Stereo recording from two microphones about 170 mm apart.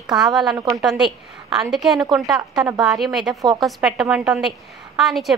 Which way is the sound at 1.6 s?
Centre (ahead or behind).